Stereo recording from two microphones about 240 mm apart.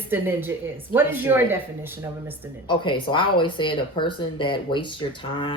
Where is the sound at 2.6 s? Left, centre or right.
Centre.